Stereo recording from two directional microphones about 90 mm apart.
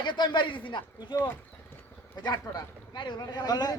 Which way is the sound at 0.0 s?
55° left (ahead or behind).